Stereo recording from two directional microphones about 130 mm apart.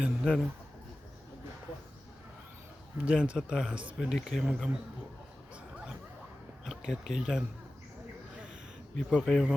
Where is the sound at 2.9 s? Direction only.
10° right (ahead or behind).